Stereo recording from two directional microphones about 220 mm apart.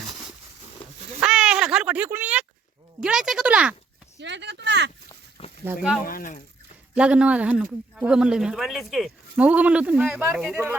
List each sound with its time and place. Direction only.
1.2 s a sound: 5° right (ahead or behind)
3.0 s speech: 5° right (ahead or behind)
4.2 s speech: 50° right (ahead or behind)
5.6 s speech: 5° right (ahead or behind)
6.1 s speech: 40° left (ahead or behind)
6.9 s speech: 5° right (ahead or behind)